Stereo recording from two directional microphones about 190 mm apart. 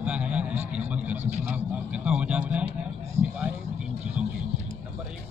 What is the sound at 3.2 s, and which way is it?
Vehicle, 35° right (ahead or behind).